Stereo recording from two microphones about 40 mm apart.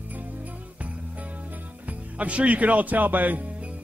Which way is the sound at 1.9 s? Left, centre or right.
Right.